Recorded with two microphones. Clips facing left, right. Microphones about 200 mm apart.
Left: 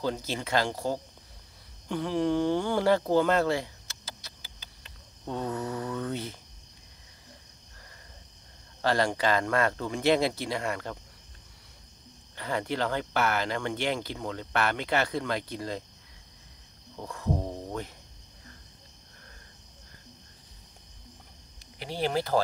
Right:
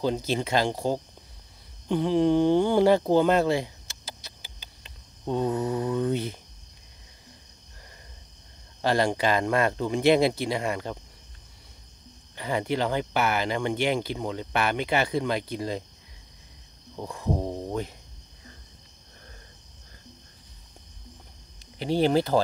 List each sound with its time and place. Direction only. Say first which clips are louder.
0.0 s speech: right 5 dB; 20° right (ahead or behind)
8.8 s speech: right 2 dB; 15° right (ahead or behind)
12.4 s speech: right 3 dB; 15° right (ahead or behind)
16.9 s cricket: right 2 dB; 15° right (ahead or behind)
21.7 s speech: right 7 dB; 25° right (ahead or behind)